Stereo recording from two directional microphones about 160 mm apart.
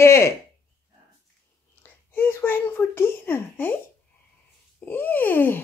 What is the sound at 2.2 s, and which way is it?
A woman's voice, 15° left (ahead or behind).